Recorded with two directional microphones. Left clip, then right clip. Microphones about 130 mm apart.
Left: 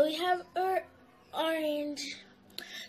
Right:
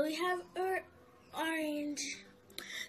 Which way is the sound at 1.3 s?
30° right (ahead or behind).